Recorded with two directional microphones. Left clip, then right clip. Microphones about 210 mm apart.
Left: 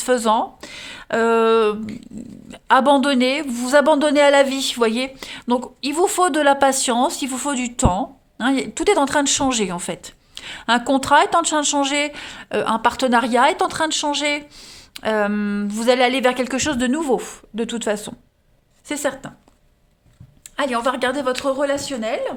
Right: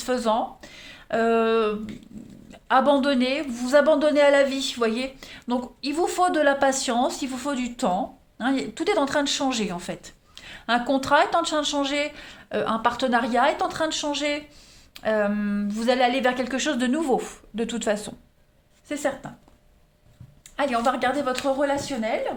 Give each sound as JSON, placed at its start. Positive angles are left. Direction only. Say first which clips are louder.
{"t": 0.0, "sound": "speech", "louder": "left 6 dB", "side_deg": 45}
{"t": 18.9, "sound": "speech", "louder": "left 3 dB", "side_deg": 45}
{"t": 20.6, "sound": "speech", "louder": "left 3 dB", "side_deg": 40}